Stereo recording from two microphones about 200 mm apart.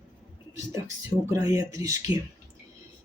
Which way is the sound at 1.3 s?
15° right (ahead or behind).